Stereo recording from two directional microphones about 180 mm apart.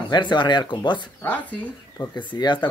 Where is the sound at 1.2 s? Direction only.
10° left (ahead or behind).